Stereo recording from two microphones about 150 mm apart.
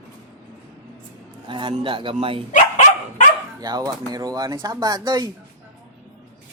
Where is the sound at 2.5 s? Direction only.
55° left (ahead or behind).